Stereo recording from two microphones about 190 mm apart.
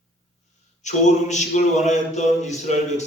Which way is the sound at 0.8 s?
35° left (ahead or behind).